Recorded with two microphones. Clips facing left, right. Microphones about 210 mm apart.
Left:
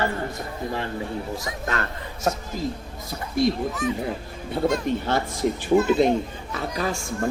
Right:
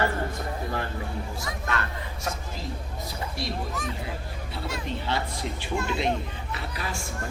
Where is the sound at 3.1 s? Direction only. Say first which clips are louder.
Left 12 dB; 50° left (ahead or behind).